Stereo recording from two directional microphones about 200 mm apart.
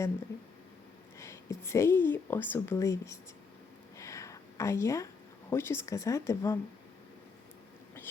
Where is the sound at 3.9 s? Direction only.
15° left (ahead or behind).